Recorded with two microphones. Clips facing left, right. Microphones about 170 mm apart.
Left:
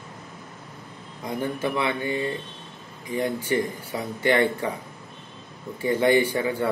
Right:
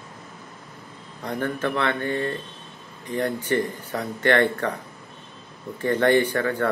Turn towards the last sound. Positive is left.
turn(degrees=10)  # may be behind; listen again after turning